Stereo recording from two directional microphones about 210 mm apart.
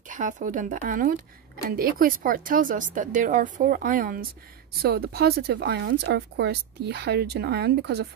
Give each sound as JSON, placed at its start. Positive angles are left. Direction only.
{"t": 0.1, "sound": "speech", "side_deg": -40}